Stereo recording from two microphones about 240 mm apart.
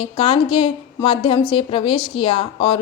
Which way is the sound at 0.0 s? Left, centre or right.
Left.